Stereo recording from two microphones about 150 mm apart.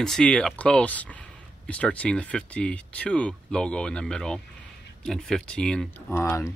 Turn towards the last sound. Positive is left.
turn(degrees=20)  # may be behind; listen again after turning